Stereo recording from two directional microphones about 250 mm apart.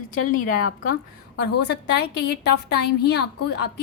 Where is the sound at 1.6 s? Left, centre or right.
Left.